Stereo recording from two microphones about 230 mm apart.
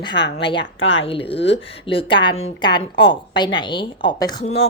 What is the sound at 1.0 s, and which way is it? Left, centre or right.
Speech, left.